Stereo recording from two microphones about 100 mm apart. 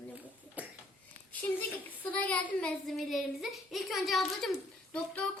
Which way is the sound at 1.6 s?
15° left (ahead or behind).